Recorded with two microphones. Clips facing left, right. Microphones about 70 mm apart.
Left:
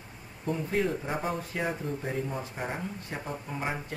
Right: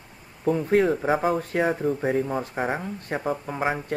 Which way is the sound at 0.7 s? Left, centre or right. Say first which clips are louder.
Right 10 dB; right.